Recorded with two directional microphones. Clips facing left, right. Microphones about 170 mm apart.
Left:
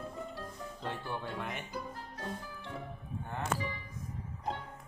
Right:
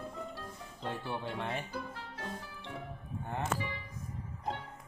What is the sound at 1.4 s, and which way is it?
Speech, 30° right (ahead or behind).